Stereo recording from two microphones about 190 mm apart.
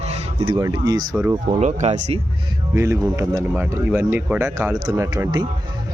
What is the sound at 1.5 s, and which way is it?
Speech, 35° right (ahead or behind).